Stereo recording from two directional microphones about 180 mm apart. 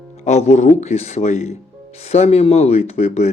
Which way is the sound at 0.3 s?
40° left (ahead or behind).